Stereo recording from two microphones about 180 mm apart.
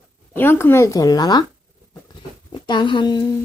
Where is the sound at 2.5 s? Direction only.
25° left (ahead or behind).